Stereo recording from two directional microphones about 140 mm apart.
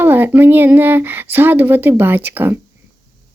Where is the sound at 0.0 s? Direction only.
15° right (ahead or behind).